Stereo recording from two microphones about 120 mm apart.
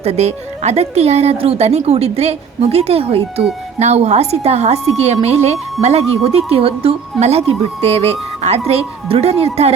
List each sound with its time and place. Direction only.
0.0 s speech: 65° right (ahead or behind)